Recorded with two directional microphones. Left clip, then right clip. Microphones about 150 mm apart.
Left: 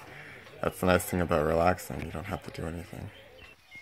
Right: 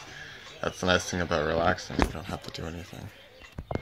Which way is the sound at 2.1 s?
5° left (ahead or behind).